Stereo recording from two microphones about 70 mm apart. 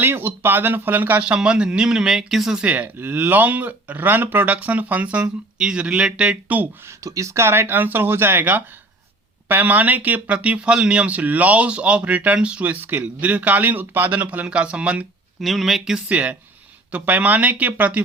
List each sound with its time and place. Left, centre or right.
0.0 s speech: right; by 2.6 s centre
2.6 s speech: right
7.0 s speech: right; by 15.0 s centre
15.4 s speech: centre
16.0 s speech: centre